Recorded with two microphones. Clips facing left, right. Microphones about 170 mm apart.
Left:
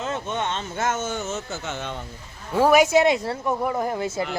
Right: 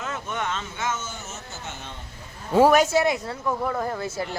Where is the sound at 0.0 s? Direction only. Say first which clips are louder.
Left 3 dB; 25° left (ahead or behind).